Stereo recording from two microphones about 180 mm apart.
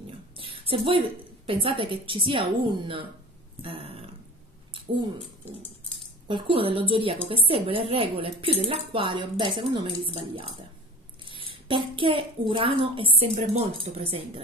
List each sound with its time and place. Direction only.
0.4 s a woman's voice: 30° right (ahead or behind)
6.2 s a child's voice: 30° right (ahead or behind)